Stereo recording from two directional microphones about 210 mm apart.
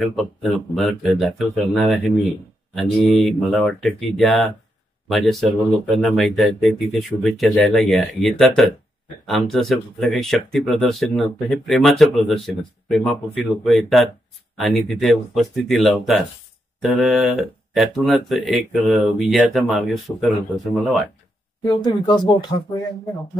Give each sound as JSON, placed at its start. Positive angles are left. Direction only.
{"t": 0.1, "sound": "speech", "side_deg": 0}
{"t": 21.6, "sound": "speech", "side_deg": 20}